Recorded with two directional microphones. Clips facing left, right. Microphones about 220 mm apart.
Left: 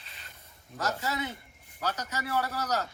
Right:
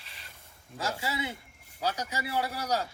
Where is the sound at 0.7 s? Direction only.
10° right (ahead or behind).